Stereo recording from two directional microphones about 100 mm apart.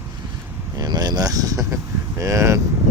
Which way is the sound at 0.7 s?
40° right (ahead or behind).